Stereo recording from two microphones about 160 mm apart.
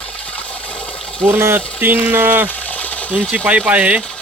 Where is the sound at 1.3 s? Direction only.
15° right (ahead or behind).